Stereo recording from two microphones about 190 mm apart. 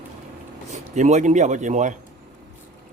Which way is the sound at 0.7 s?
40° right (ahead or behind).